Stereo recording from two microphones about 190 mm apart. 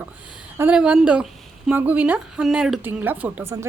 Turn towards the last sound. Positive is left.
turn(degrees=-15)  # may be behind; listen again after turning